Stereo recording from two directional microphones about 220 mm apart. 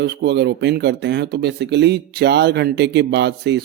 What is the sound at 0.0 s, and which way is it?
Speech, 50° right (ahead or behind).